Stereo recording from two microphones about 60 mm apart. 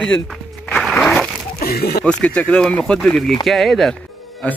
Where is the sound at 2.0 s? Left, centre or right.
Left.